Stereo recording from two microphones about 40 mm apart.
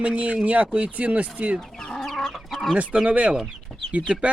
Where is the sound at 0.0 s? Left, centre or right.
Right.